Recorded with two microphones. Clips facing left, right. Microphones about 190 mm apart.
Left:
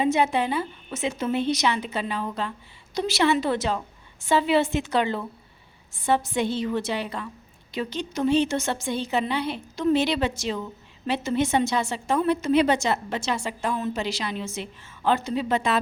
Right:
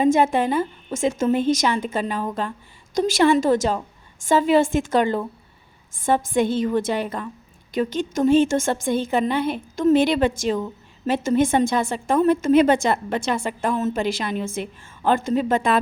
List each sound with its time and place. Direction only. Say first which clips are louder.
0.0 s a woman's voice: right 5 dB; 45° right (ahead or behind)